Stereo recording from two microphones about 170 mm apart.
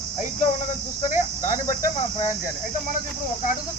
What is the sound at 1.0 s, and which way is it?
Cricket, 45° left (ahead or behind).